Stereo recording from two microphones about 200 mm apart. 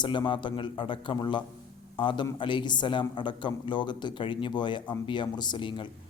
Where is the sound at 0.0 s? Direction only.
25° left (ahead or behind).